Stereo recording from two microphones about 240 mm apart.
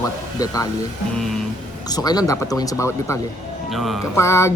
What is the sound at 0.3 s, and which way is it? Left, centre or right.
Speech, centre.